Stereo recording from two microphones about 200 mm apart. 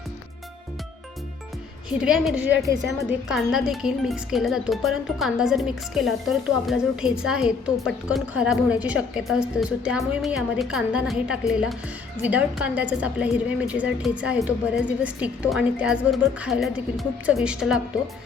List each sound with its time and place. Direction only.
2.0 s speech: centre (ahead or behind)